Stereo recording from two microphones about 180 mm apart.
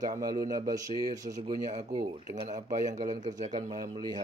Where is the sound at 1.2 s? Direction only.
40° right (ahead or behind).